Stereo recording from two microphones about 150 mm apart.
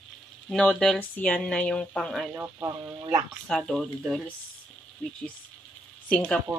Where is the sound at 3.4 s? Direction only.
5° left (ahead or behind).